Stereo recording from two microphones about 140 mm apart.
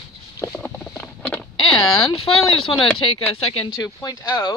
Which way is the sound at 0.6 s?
10° left (ahead or behind).